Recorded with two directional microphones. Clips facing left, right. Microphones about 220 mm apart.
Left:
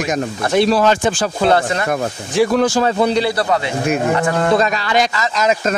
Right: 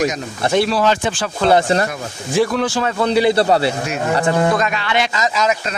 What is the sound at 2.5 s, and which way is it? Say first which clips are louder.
Speech: left 4 dB; 45° left (ahead or behind).